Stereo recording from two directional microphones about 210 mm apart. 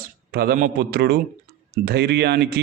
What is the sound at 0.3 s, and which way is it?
A man's voice, 45° right (ahead or behind).